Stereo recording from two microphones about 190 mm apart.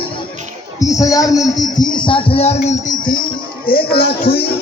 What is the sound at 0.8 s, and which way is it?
A man's voice, 20° left (ahead or behind).